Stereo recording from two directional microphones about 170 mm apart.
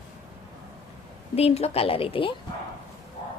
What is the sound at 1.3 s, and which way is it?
Speech, 35° left (ahead or behind).